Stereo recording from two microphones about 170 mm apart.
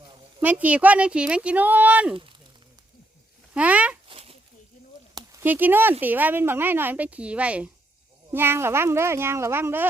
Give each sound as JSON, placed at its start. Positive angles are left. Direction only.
{"t": 0.4, "sound": "speech", "side_deg": -10}
{"t": 3.5, "sound": "speech", "side_deg": -10}
{"t": 4.1, "sound": "a sound", "side_deg": -35}
{"t": 5.4, "sound": "speech", "side_deg": -10}